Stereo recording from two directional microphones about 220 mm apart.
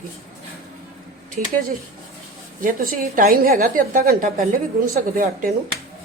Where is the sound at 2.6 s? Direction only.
40° right (ahead or behind).